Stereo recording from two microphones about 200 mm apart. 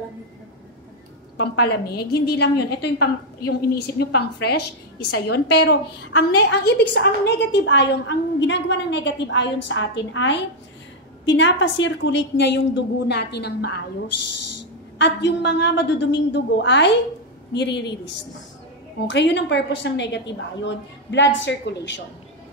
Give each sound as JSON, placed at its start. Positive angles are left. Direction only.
{"t": 1.3, "sound": "a woman's voice", "side_deg": 55}
{"t": 15.0, "sound": "a woman's voice", "side_deg": 60}